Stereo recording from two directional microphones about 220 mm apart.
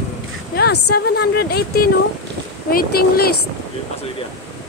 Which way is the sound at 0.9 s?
45° left (ahead or behind).